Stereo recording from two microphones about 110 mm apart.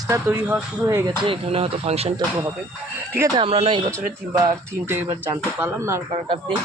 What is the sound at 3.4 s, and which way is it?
Speech, 60° right (ahead or behind).